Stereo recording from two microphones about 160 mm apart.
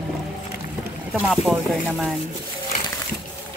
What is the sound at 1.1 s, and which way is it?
Speech, centre (ahead or behind).